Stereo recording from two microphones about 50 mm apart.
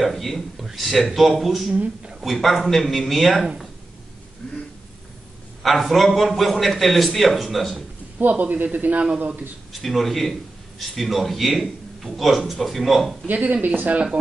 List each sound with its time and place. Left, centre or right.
0.0 s a man's voice: centre
1.7 s speech: right
2.5 s a man's voice: centre
5.6 s a man's voice: centre
8.2 s speech: right
9.7 s a man's voice: centre
13.3 s speech: right